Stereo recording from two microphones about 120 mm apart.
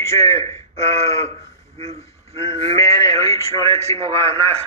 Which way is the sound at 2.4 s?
50° right (ahead or behind).